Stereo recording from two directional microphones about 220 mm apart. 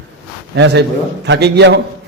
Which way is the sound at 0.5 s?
50° right (ahead or behind).